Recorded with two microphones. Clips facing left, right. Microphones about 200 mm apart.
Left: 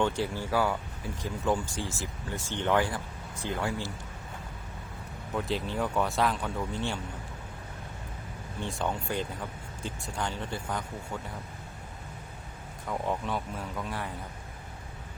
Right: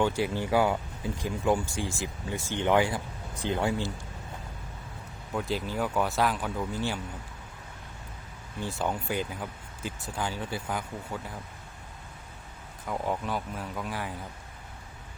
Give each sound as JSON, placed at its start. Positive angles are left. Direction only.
{"t": 0.0, "sound": "speech", "side_deg": -15}
{"t": 5.3, "sound": "speech", "side_deg": 0}
{"t": 8.6, "sound": "speech", "side_deg": -5}
{"t": 12.9, "sound": "speech", "side_deg": -5}